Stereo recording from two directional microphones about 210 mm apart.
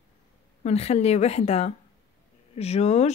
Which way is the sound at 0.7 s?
30° left (ahead or behind).